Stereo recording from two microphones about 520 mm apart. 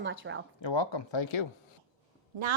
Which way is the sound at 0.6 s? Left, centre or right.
Left.